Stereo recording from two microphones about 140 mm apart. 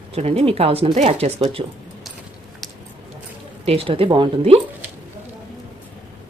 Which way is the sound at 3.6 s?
45° right (ahead or behind).